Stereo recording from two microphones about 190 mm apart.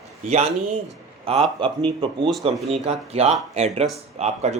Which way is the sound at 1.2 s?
30° right (ahead or behind).